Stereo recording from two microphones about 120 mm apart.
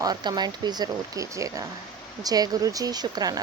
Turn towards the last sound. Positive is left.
turn(degrees=-35)  # may be behind; listen again after turning